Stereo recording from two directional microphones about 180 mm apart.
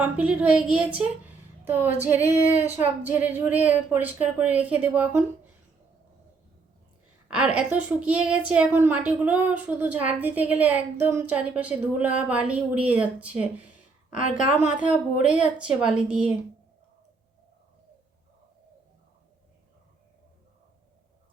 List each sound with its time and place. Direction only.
0.0 s a woman's voice: 10° right (ahead or behind)
7.3 s a woman's voice: 5° right (ahead or behind)
14.1 s a woman's voice: 45° left (ahead or behind)
14.8 s a woman's voice: 5° right (ahead or behind)